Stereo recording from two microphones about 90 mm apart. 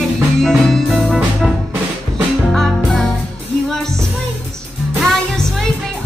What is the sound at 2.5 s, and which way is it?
Music, 5° left (ahead or behind).